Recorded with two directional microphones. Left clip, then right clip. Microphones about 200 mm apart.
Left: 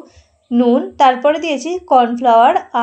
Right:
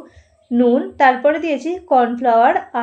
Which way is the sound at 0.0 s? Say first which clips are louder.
Left 1 dB; 20° left (ahead or behind).